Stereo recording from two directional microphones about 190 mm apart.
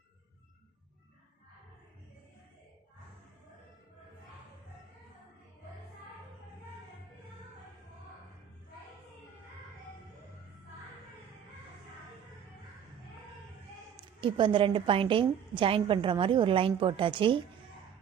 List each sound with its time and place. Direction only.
14.2 s a woman's voice: 25° right (ahead or behind)